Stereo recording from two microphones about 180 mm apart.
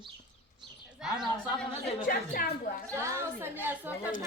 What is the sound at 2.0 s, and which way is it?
Speech, 50° left (ahead or behind).